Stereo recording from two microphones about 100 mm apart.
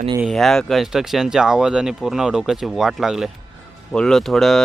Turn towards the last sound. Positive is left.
turn(degrees=0)  # may be behind; listen again after turning